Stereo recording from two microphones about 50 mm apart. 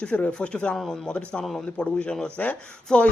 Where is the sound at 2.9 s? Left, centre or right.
Centre.